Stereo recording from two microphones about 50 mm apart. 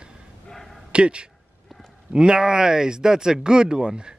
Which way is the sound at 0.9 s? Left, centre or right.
Right.